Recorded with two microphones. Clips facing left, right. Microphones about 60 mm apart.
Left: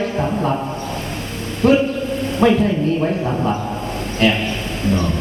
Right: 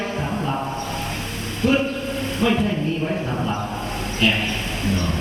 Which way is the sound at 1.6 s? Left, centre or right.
Left.